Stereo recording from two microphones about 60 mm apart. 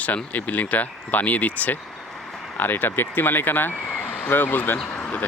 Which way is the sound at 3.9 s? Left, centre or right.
Left.